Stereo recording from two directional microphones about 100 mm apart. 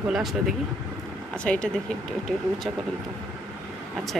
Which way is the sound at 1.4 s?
10° left (ahead or behind).